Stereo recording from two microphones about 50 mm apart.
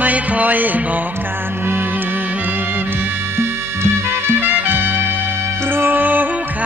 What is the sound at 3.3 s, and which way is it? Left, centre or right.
Music, right.